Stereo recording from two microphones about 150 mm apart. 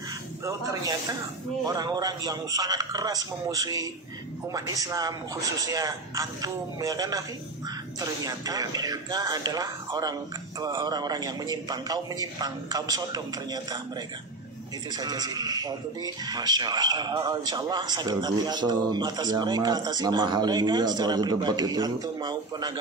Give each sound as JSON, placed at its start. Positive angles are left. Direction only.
{"t": 0.5, "sound": "a man's voice", "side_deg": -20}
{"t": 15.0, "sound": "a man's voice", "side_deg": -25}